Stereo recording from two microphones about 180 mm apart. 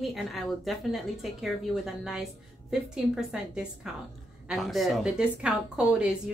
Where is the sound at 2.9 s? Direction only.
5° right (ahead or behind).